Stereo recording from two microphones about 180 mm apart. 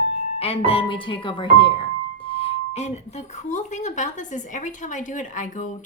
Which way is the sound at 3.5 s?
40° left (ahead or behind).